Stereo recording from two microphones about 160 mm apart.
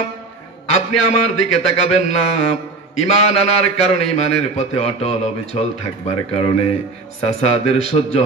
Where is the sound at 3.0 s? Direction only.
40° left (ahead or behind).